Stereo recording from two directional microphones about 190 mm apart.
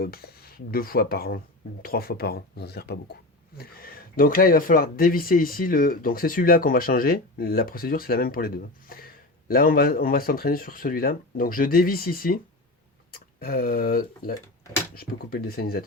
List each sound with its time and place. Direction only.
0.0 s speech: 55° left (ahead or behind)